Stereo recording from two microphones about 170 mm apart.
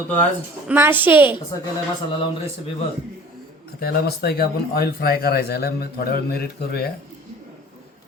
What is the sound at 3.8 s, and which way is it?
Speech, 65° left (ahead or behind).